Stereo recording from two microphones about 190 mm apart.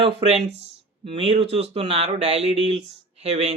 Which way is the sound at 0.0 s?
30° right (ahead or behind).